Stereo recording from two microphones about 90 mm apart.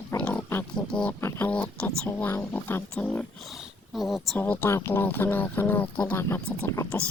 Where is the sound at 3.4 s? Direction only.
Centre (ahead or behind).